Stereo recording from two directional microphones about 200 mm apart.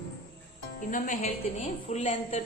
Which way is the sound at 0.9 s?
35° left (ahead or behind).